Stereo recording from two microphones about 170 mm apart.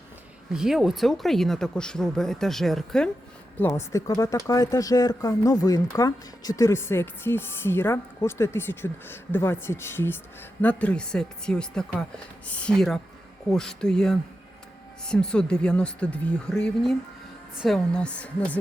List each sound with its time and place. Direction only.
0.5 s speech: 5° right (ahead or behind)
3.6 s speech: 15° left (ahead or behind)